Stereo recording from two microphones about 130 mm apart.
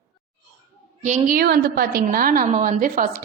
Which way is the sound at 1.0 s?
70° right (ahead or behind).